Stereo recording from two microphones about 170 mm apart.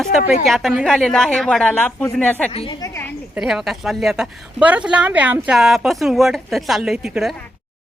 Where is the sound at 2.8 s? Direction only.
15° left (ahead or behind).